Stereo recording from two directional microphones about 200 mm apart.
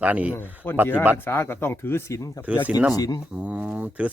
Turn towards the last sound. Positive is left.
turn(degrees=-5)  # may be behind; listen again after turning